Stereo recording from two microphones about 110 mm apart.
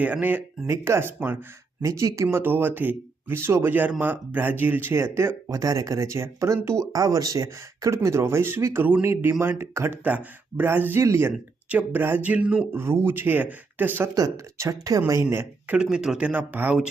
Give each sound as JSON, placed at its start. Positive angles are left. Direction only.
{"t": 0.0, "sound": "speech", "side_deg": -15}
{"t": 1.8, "sound": "speech", "side_deg": -30}
{"t": 14.2, "sound": "speech", "side_deg": -30}